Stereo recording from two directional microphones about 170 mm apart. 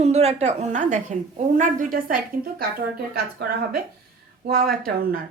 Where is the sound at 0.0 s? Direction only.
40° right (ahead or behind); by 2.6 s 60° right (ahead or behind).